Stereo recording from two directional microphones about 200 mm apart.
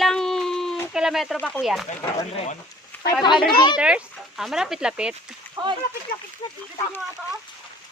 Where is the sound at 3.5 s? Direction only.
20° left (ahead or behind).